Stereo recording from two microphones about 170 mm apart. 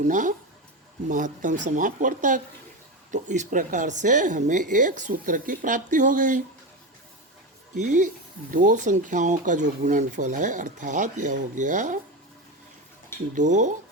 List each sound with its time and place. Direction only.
0.1 s speech: 50° right (ahead or behind)
7.8 s speech: 45° right (ahead or behind)
13.3 s speech: 45° right (ahead or behind)